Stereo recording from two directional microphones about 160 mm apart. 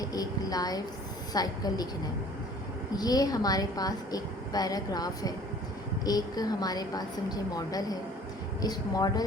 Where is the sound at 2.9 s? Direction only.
25° left (ahead or behind).